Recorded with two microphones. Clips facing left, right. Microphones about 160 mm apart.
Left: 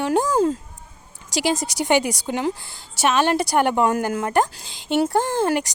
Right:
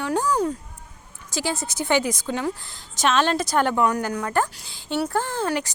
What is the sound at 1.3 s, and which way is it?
Speech, 75° left (ahead or behind).